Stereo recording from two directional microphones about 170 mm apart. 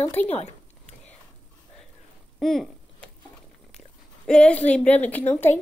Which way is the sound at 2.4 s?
Centre (ahead or behind).